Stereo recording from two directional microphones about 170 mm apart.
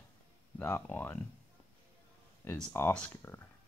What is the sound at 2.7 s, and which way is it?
Speech, 10° left (ahead or behind).